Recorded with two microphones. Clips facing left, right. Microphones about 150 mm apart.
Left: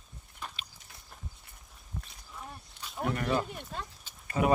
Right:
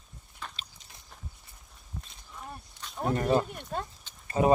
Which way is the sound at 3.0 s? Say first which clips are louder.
Right 4 dB; 30° right (ahead or behind).